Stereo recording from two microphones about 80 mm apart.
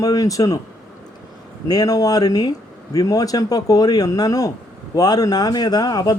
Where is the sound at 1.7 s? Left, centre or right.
Left.